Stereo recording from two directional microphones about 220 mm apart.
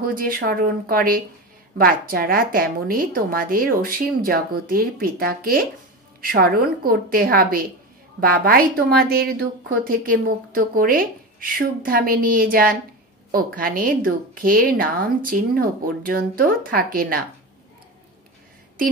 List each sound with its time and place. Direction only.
0.0 s a woman's voice: 40° right (ahead or behind)